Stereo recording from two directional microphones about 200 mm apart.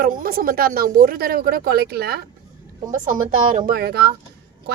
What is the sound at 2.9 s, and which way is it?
Speech, 40° right (ahead or behind).